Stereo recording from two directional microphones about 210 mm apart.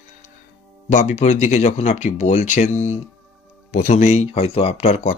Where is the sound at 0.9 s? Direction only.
35° left (ahead or behind).